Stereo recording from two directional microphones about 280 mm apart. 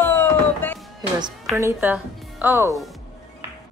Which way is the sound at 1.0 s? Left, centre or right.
Centre.